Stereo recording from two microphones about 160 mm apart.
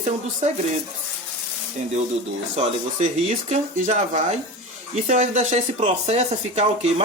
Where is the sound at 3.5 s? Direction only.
45° right (ahead or behind).